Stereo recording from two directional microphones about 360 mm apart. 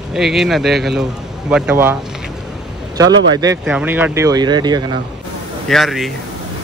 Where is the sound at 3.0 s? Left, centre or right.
Centre.